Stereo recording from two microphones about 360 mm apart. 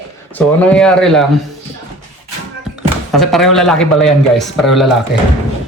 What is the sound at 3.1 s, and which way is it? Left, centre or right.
Speech, centre.